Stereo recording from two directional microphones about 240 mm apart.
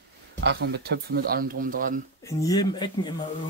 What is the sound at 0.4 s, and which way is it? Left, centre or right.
Speech, right.